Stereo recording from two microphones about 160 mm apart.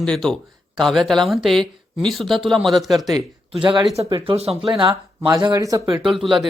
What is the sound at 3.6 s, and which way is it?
Speech, 30° right (ahead or behind).